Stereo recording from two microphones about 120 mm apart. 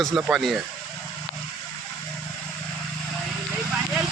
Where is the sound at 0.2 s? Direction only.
5° right (ahead or behind).